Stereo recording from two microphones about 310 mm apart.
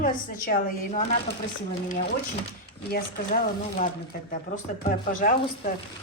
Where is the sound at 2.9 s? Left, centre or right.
Left.